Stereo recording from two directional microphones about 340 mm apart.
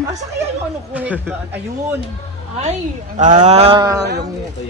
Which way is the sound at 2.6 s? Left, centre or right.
Right.